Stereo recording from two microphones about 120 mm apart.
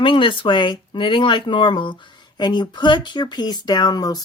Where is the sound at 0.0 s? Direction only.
45° left (ahead or behind).